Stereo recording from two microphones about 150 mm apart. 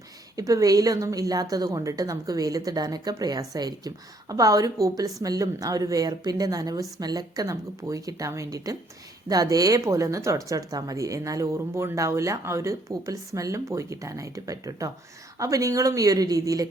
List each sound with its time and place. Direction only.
0.3 s speech: 25° right (ahead or behind)